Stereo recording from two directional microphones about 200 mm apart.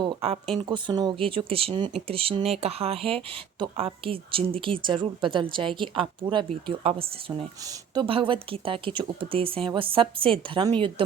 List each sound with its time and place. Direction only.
0.0 s speech: 25° right (ahead or behind)